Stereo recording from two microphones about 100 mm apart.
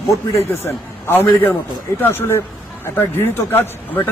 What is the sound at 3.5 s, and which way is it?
Speech, 25° left (ahead or behind).